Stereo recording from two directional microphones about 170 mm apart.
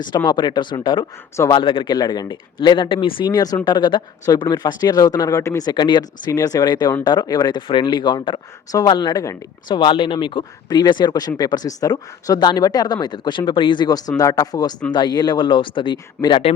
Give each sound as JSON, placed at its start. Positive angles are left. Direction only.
{"t": 0.3, "sound": "speech", "side_deg": 25}